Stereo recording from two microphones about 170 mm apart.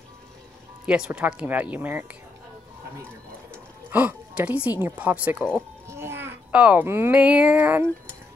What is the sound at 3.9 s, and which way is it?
A child's voice, 10° right (ahead or behind).